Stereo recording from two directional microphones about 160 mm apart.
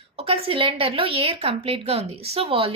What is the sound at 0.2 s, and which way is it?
A woman's voice, 35° right (ahead or behind).